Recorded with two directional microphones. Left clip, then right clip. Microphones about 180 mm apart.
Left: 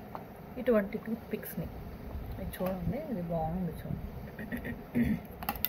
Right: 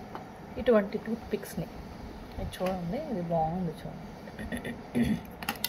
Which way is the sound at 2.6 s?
5° right (ahead or behind).